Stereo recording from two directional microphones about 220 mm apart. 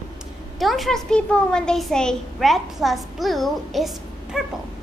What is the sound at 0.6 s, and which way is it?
A child's voice, centre (ahead or behind).